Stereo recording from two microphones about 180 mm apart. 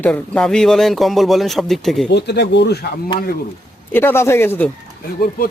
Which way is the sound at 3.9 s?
10° left (ahead or behind).